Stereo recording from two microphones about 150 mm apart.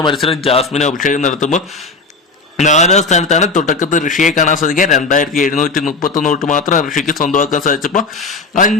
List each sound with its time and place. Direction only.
0.0 s speech: 35° left (ahead or behind)
0.7 s a man's voice: 50° left (ahead or behind)
2.6 s a man's voice: 50° left (ahead or behind)